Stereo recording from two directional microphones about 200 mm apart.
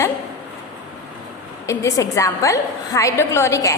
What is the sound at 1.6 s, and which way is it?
A woman's voice, 15° left (ahead or behind).